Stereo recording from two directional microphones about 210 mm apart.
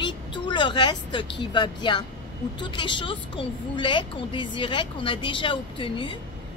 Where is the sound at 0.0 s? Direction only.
20° left (ahead or behind).